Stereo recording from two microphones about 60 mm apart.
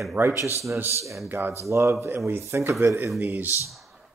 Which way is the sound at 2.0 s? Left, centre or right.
Right.